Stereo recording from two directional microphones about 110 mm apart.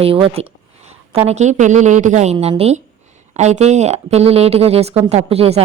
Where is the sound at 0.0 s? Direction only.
60° right (ahead or behind).